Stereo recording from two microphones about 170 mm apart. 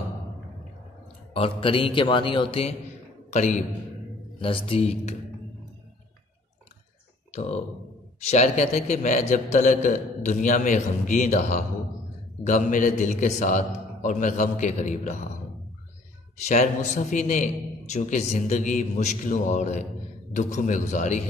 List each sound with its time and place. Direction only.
1.3 s a man's voice: 30° left (ahead or behind)
3.3 s a man's voice: 45° left (ahead or behind)
4.4 s a man's voice: 30° left (ahead or behind)
7.3 s a man's voice: 40° left (ahead or behind)
16.4 s a man's voice: 45° left (ahead or behind)